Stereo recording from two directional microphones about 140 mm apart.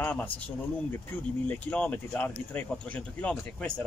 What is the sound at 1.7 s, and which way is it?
Speech, 10° left (ahead or behind).